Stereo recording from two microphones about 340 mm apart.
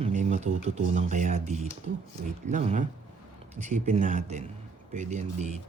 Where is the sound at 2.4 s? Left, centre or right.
Centre.